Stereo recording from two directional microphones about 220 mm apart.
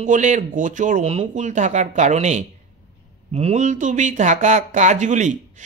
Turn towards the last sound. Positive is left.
turn(degrees=-35)  # may be behind; listen again after turning